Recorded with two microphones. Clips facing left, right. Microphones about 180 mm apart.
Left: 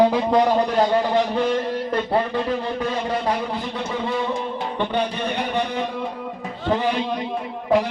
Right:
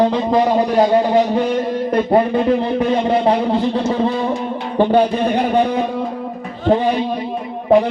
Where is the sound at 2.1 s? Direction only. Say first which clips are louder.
Right 9 dB; 25° right (ahead or behind).